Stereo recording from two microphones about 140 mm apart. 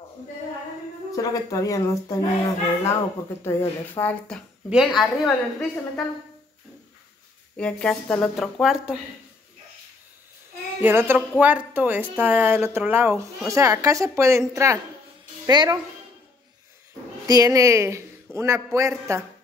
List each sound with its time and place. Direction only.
1.1 s speech: 25° left (ahead or behind)
3.4 s a woman's voice: 15° left (ahead or behind)
4.6 s a woman's voice: 5° right (ahead or behind)
7.5 s a woman's voice: 5° left (ahead or behind)
10.8 s a man's voice: 15° right (ahead or behind)
17.3 s a man's voice: 25° right (ahead or behind)